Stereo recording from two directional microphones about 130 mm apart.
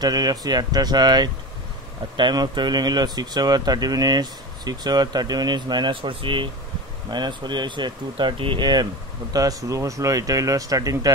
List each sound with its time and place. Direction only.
0.0 s speech: 30° right (ahead or behind)